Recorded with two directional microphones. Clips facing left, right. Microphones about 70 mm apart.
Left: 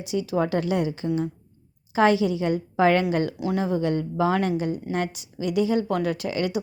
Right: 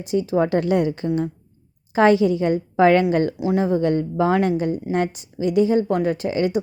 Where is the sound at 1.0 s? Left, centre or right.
Right.